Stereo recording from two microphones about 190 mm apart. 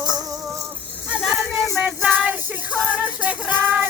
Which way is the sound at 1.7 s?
5° right (ahead or behind).